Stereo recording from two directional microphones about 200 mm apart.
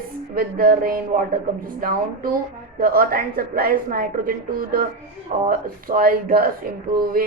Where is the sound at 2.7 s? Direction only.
45° right (ahead or behind).